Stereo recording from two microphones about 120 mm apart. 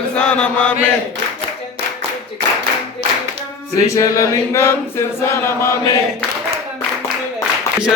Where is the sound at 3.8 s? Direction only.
25° left (ahead or behind).